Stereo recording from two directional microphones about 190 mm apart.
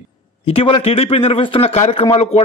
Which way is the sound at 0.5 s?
30° left (ahead or behind).